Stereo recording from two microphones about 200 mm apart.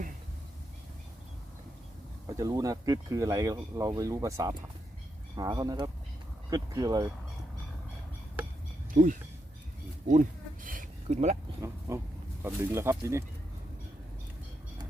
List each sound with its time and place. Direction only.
2.2 s speech: 15° right (ahead or behind)
8.9 s speech: 40° right (ahead or behind)
10.1 s a sound: 40° right (ahead or behind)
11.9 s speech: 15° right (ahead or behind)